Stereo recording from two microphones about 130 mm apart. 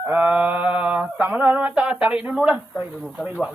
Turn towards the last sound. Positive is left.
turn(degrees=-10)  # may be behind; listen again after turning